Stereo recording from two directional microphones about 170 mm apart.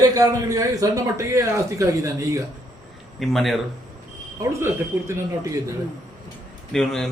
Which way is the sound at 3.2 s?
Centre (ahead or behind).